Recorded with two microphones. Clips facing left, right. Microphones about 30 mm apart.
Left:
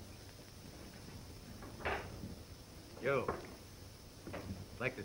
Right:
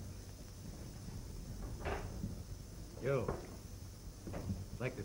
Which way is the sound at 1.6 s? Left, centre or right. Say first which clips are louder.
Left 3 dB; left.